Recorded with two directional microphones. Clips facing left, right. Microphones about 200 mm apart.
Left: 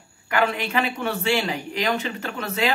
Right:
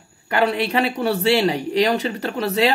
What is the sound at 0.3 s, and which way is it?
Speech, 35° right (ahead or behind).